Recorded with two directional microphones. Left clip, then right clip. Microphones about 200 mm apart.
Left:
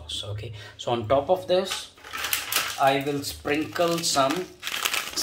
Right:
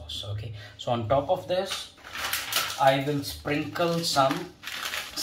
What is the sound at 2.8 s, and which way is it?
Speech, 50° left (ahead or behind).